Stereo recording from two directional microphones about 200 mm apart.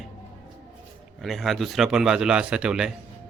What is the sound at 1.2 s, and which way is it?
Speech, centre (ahead or behind).